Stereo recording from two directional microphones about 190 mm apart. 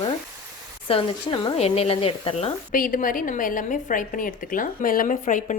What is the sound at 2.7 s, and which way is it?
A woman's voice, 45° left (ahead or behind).